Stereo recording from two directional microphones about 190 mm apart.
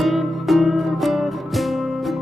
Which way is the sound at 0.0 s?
Centre (ahead or behind).